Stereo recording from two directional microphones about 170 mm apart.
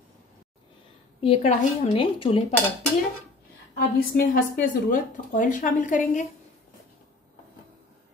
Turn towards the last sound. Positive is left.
turn(degrees=50)  # may be behind; listen again after turning